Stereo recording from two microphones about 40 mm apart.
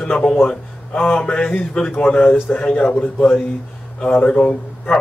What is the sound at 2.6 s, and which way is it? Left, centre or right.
Speech, left.